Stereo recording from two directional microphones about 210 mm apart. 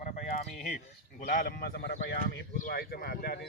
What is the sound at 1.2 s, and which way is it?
Speech, 40° left (ahead or behind).